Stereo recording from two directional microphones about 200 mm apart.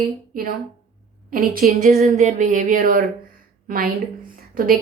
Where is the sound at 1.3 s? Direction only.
45° right (ahead or behind).